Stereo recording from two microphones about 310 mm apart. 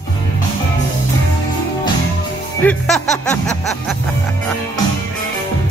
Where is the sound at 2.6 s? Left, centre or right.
Centre.